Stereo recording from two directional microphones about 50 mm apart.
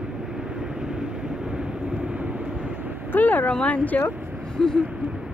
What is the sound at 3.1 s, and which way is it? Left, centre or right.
Vehicle, left.